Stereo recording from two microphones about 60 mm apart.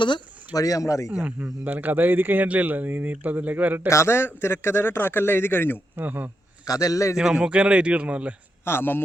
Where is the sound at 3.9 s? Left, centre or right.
Left.